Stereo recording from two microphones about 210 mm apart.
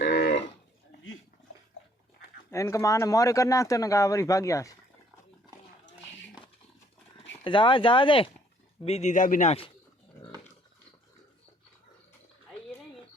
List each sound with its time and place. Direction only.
0.0 s cattle: 55° left (ahead or behind)
2.5 s speech: 15° left (ahead or behind)
7.4 s a man's voice: 25° left (ahead or behind)